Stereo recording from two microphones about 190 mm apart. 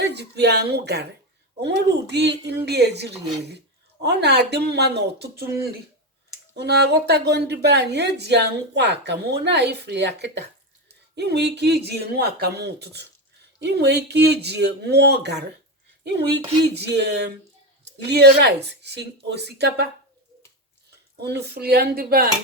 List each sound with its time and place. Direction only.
0.0 s a woman's voice: 60° right (ahead or behind)
16.8 s speech: 60° right (ahead or behind)
21.2 s speech: 60° right (ahead or behind)